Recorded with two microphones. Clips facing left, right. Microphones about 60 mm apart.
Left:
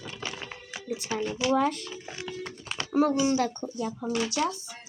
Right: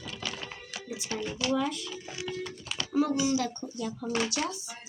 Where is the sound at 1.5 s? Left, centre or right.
Left.